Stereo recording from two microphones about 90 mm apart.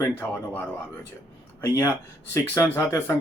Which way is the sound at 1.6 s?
35° left (ahead or behind).